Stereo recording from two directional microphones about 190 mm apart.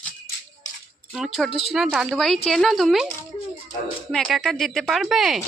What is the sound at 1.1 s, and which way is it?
A woman's voice, centre (ahead or behind).